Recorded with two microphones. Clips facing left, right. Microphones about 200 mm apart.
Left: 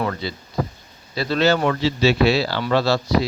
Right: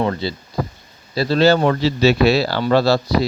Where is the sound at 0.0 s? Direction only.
30° right (ahead or behind).